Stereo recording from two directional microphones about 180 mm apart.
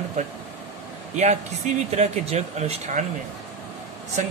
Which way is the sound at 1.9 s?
35° right (ahead or behind).